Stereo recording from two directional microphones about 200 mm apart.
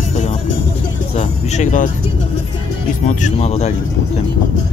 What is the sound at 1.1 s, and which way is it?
Vehicle, 35° left (ahead or behind).